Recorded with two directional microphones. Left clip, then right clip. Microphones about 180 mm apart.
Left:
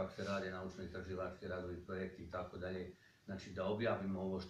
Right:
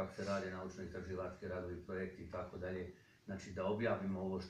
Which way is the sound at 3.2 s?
15° left (ahead or behind).